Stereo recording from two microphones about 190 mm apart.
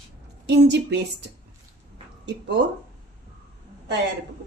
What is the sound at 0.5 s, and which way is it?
Speech, 60° right (ahead or behind).